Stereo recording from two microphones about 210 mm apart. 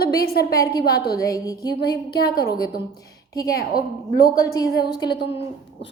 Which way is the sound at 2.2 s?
50° left (ahead or behind).